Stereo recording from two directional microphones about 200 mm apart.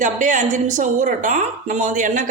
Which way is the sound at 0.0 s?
40° right (ahead or behind).